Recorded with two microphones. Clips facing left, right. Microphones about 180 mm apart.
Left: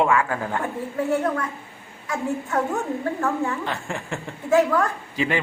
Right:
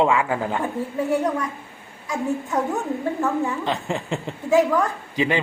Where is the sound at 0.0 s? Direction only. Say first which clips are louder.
Right 1 dB; 15° right (ahead or behind).